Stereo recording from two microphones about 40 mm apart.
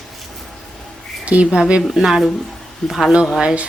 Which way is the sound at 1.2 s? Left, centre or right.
Right.